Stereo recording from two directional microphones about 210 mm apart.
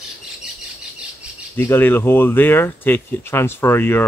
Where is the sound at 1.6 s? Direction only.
10° left (ahead or behind).